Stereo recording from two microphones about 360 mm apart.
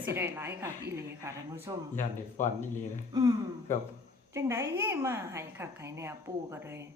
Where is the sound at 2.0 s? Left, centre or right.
Centre.